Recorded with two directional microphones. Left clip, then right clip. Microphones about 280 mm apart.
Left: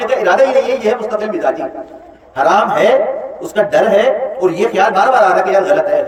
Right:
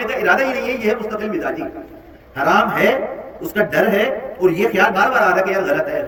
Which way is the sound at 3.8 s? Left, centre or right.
Left.